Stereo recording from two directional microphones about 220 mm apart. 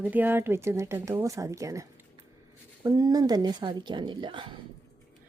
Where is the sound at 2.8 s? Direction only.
15° right (ahead or behind).